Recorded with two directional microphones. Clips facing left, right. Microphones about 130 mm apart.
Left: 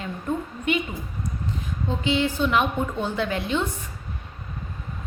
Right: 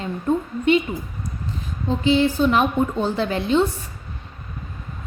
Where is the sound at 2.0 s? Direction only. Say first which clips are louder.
Right 6 dB; 35° right (ahead or behind).